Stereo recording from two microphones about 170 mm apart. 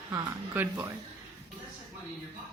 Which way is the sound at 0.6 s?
10° right (ahead or behind).